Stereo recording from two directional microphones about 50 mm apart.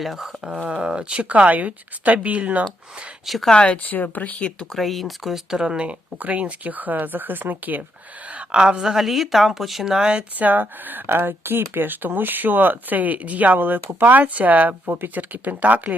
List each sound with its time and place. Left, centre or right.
0.0 s a woman's voice: centre
0.4 s speech: centre
3.2 s a woman's voice: centre
3.5 s speech: left
3.8 s speech: left
4.7 s speech: centre; by 7.9 s right
8.5 s a woman's voice: centre
10.3 s speech: right